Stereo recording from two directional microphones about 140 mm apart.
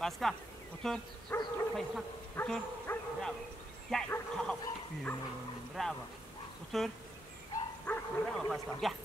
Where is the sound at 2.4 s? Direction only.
15° left (ahead or behind).